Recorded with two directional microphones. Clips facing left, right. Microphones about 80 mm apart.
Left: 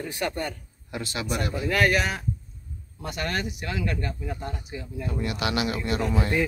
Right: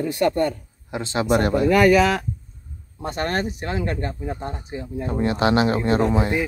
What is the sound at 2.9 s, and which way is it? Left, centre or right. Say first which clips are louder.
Speech: right 6 dB; right.